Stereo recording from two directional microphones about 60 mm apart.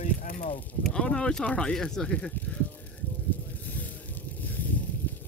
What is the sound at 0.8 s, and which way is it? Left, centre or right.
Speech, centre.